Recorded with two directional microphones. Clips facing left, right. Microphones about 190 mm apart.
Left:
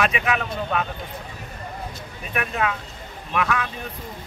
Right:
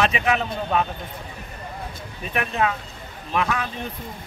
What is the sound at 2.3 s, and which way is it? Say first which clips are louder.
Speech: right 2 dB; 30° right (ahead or behind).